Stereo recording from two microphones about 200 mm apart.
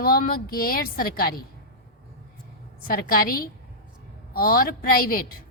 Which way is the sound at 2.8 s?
45° left (ahead or behind).